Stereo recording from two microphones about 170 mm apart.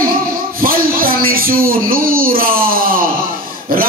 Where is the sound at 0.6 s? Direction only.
60° right (ahead or behind).